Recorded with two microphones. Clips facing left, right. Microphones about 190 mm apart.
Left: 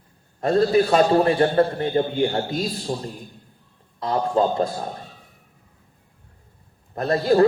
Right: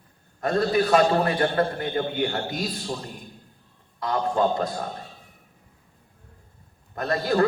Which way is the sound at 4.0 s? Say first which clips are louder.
Left 3 dB; 30° left (ahead or behind).